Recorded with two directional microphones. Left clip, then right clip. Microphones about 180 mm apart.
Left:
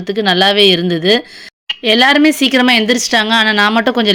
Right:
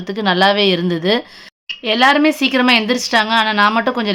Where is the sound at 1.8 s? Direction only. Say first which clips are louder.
Left 3 dB; 25° left (ahead or behind).